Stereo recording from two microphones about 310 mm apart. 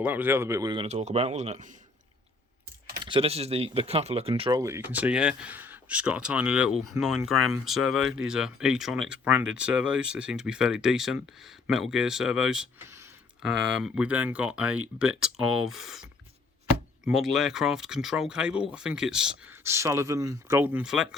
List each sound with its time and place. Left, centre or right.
0.0 s speech: centre; by 1.7 s right
3.0 s speech: centre
17.1 s speech: centre